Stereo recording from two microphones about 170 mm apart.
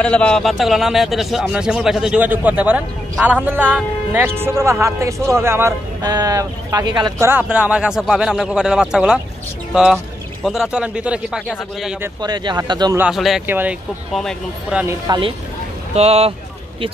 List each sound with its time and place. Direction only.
0.0 s a man's voice: 5° left (ahead or behind)
10.4 s a man's voice: 5° right (ahead or behind)
12.2 s speech: 25° right (ahead or behind)
12.9 s a man's voice: 5° right (ahead or behind)
14.9 s speech: 25° right (ahead or behind)
15.9 s speech: 35° right (ahead or behind)